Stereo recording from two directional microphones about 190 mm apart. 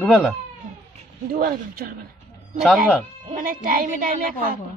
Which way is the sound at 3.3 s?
45° right (ahead or behind).